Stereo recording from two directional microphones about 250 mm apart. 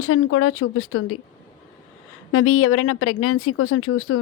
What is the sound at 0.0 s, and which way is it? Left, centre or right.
Speech, left.